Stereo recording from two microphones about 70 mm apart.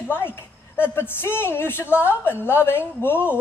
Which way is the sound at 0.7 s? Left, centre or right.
Left.